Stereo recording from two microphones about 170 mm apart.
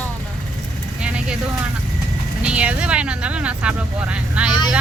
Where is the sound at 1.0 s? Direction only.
5° right (ahead or behind).